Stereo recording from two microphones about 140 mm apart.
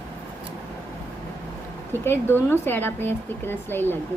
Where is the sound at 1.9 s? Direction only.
15° left (ahead or behind).